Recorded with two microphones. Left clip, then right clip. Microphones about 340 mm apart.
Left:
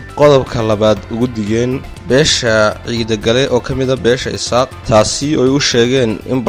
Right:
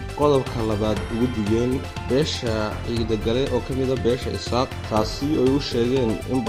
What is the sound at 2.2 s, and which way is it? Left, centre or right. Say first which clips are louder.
Speech: left 14 dB; left.